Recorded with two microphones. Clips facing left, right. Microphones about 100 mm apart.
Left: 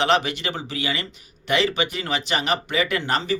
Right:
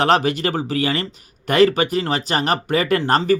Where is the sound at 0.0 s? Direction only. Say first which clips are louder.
Right 4 dB; 40° right (ahead or behind).